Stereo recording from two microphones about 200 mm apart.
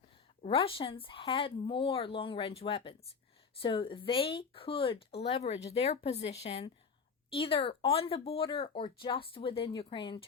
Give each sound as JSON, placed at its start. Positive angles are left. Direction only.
{"t": 0.4, "sound": "speech", "side_deg": 25}